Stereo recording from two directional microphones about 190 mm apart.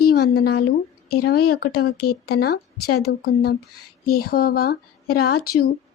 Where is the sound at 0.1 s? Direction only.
55° left (ahead or behind).